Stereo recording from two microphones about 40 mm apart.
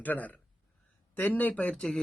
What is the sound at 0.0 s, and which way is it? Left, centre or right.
Speech, left.